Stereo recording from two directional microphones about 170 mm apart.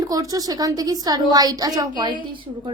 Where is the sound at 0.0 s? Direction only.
20° right (ahead or behind).